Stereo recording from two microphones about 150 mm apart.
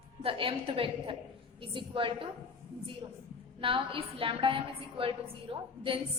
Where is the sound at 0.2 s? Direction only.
35° right (ahead or behind).